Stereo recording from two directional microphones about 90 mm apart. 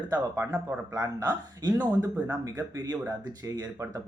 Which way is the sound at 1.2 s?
45° right (ahead or behind).